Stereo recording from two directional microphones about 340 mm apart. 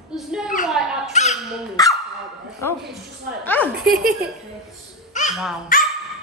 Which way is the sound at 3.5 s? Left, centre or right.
Centre.